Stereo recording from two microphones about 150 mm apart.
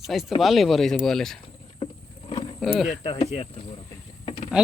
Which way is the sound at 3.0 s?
40° left (ahead or behind).